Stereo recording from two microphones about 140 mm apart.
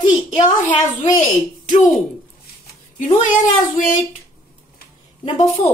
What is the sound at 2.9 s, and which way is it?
Speech, 65° left (ahead or behind).